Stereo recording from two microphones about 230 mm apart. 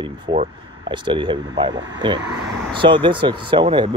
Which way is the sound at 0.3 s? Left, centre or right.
Centre.